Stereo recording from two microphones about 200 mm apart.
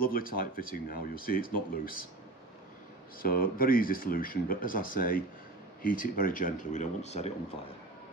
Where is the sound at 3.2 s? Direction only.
45° left (ahead or behind).